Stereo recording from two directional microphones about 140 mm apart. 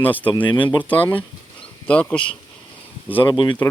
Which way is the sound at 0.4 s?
35° left (ahead or behind).